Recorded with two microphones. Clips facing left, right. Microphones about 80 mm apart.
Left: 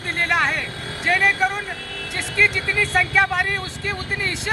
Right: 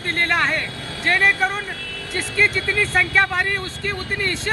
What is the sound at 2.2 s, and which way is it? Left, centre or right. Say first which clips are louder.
Speech: even; centre.